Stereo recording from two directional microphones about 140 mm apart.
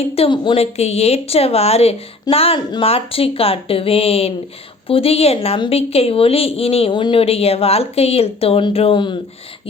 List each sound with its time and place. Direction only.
0.1 s a woman's voice: 40° left (ahead or behind)